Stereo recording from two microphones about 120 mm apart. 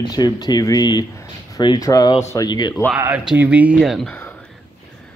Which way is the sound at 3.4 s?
10° right (ahead or behind).